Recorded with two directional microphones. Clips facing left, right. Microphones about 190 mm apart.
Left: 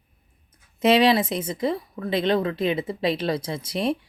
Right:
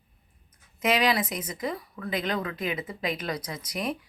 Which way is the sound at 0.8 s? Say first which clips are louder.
Left 7 dB; 30° left (ahead or behind).